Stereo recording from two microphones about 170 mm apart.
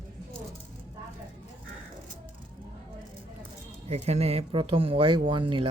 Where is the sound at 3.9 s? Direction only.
40° right (ahead or behind).